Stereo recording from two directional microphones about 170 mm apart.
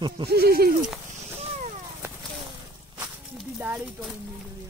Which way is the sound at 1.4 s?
45° right (ahead or behind).